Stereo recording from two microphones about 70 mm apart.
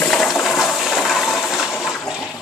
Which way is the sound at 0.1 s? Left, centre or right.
Centre.